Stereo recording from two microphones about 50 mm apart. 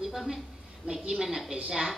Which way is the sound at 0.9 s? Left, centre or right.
Centre.